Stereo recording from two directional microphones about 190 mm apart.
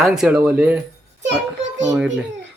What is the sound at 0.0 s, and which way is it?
Speech, centre (ahead or behind).